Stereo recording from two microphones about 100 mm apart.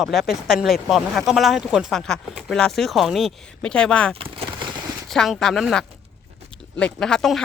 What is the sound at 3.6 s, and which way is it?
Speech, 10° left (ahead or behind).